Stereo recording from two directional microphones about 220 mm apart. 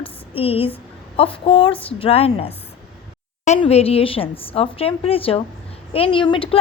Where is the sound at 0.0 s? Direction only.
25° left (ahead or behind).